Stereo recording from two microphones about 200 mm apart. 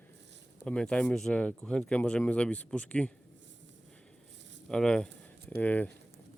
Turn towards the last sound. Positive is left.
turn(degrees=10)  # may be behind; listen again after turning